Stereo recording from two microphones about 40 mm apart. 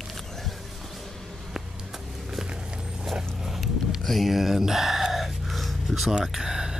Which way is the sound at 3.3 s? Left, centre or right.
Centre.